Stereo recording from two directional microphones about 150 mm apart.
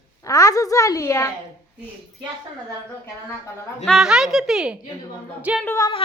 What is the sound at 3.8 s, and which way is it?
Speech, centre (ahead or behind).